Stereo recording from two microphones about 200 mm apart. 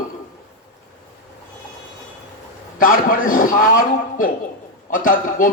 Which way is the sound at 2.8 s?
40° left (ahead or behind).